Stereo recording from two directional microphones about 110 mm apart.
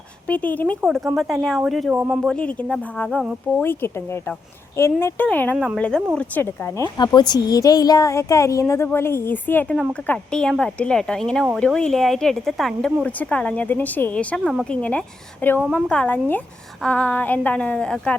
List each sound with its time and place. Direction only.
0.3 s speech: 15° left (ahead or behind)
1.1 s speech: centre (ahead or behind)
1.9 s speech: 15° right (ahead or behind)
2.2 s speech: 10° left (ahead or behind)
3.6 s speech: 20° left (ahead or behind)
5.5 s speech: 5° right (ahead or behind)
6.1 s speech: 20° left (ahead or behind)
6.8 s speech: 40° left (ahead or behind); by 13.1 s centre (ahead or behind)
13.1 s speech: 10° left (ahead or behind)